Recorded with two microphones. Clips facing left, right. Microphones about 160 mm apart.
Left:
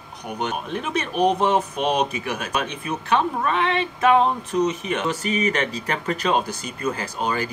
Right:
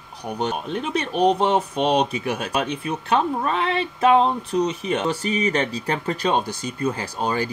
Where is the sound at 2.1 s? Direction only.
35° right (ahead or behind).